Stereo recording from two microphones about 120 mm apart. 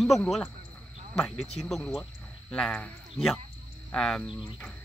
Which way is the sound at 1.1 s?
5° left (ahead or behind).